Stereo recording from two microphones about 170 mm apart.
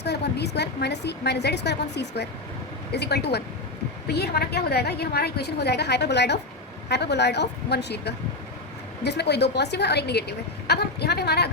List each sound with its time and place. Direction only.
0.0 s a woman's voice: 80° left